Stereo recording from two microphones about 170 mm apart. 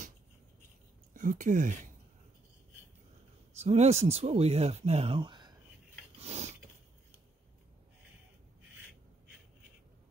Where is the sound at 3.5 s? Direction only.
40° right (ahead or behind).